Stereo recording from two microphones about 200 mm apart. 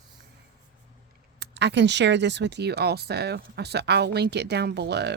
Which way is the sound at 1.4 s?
60° right (ahead or behind).